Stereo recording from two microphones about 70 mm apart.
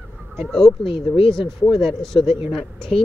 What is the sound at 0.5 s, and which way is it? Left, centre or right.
Speech, centre.